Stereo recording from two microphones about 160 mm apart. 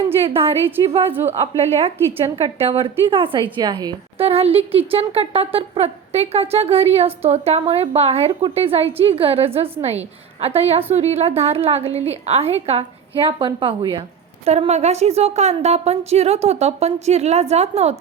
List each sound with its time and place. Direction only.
1.0 s a woman's voice: 15° right (ahead or behind)
1.3 s a woman's voice: 40° right (ahead or behind)
4.3 s speech: 40° right (ahead or behind)
14.4 s a woman's voice: 40° right (ahead or behind)